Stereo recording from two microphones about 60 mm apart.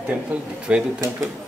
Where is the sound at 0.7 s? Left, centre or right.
Centre.